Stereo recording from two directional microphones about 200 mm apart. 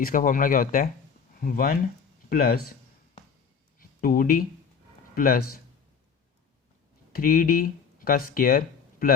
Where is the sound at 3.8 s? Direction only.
45° left (ahead or behind).